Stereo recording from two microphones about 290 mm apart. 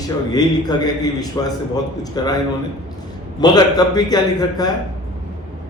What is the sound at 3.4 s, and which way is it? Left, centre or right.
A man's voice, centre.